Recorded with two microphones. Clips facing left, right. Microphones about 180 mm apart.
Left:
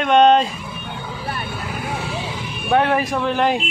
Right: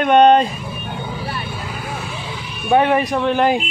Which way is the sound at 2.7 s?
Centre (ahead or behind).